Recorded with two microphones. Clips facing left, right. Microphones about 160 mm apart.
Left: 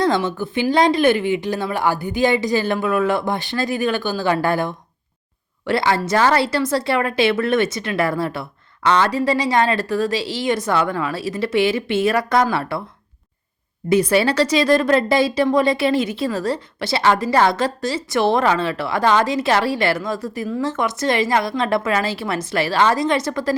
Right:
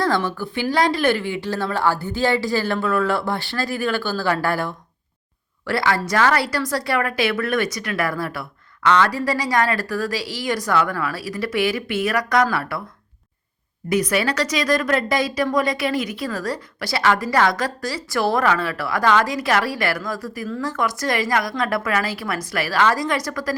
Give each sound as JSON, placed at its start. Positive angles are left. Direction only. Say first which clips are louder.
{"t": 0.0, "sound": "speech", "louder": "left 2 dB", "side_deg": 20}
{"t": 13.9, "sound": "speech", "louder": "left 4 dB", "side_deg": 30}